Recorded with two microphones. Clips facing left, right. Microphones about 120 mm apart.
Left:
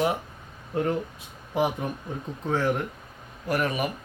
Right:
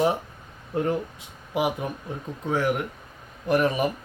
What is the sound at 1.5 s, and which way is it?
Speech, 15° right (ahead or behind).